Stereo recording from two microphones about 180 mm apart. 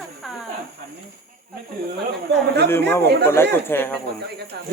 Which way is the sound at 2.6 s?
10° left (ahead or behind).